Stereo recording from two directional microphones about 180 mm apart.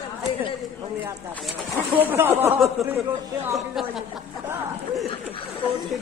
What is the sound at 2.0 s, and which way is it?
Speech, 10° right (ahead or behind).